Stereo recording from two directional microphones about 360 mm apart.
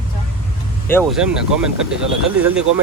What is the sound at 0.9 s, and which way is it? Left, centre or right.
Speech, centre.